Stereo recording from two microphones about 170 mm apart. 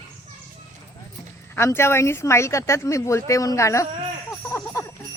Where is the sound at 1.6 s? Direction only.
15° left (ahead or behind).